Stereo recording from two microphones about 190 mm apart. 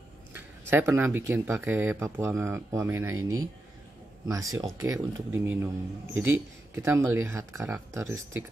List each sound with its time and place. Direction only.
0.3 s speech: 10° right (ahead or behind)
4.3 s speech: 15° right (ahead or behind)